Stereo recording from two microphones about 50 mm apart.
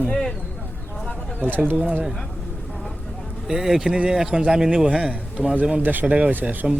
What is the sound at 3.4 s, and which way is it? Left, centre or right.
Speech, centre.